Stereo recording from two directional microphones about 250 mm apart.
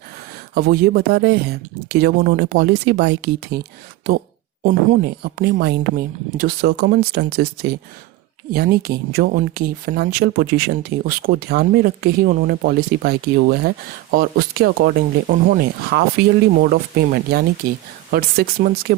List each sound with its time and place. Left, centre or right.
0.5 s speech: right